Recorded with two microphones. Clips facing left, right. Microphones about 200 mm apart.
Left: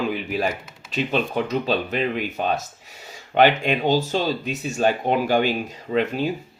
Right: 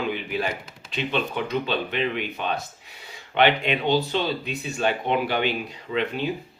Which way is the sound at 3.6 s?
45° left (ahead or behind).